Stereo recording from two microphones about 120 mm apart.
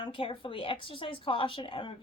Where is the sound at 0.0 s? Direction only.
45° left (ahead or behind).